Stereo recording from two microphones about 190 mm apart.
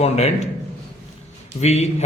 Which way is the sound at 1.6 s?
35° left (ahead or behind).